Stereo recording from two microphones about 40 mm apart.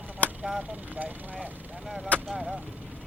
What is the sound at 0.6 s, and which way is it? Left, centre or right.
Speech, right.